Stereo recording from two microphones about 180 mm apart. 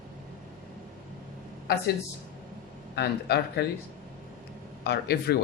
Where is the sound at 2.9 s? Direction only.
65° left (ahead or behind).